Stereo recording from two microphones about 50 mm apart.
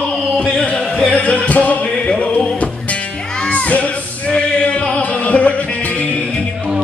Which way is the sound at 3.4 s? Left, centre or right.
Left.